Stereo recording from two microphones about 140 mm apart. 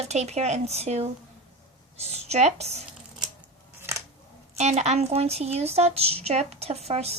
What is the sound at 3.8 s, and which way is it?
Scissors, 20° right (ahead or behind).